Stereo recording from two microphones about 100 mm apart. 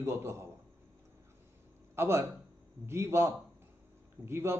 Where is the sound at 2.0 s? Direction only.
25° right (ahead or behind).